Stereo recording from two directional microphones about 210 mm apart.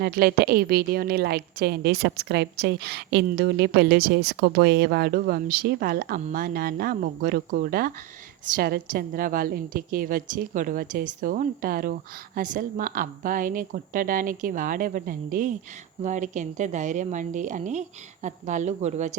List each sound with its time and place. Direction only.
0.0 s a woman's voice: 45° right (ahead or behind)